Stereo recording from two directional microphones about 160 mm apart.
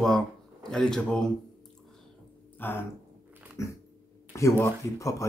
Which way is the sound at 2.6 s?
15° left (ahead or behind).